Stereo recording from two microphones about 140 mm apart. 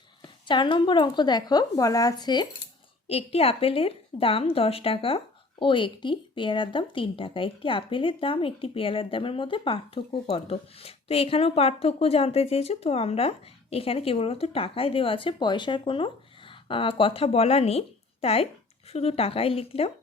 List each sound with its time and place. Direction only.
0.2 s a woman's voice: 35° left (ahead or behind)
3.1 s a woman's voice: 45° left (ahead or behind)